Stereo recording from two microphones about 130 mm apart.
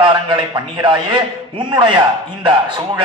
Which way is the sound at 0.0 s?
40° right (ahead or behind).